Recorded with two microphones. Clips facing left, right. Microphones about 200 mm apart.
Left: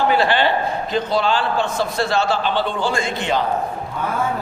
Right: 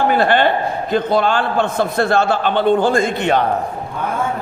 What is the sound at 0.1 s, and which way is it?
A man's voice, 50° right (ahead or behind).